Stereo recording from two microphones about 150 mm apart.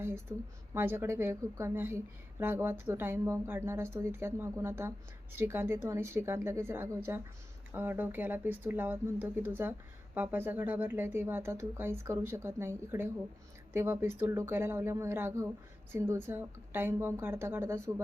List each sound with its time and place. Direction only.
0.0 s speech: 15° right (ahead or behind)